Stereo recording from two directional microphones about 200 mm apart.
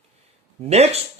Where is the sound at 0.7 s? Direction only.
30° right (ahead or behind).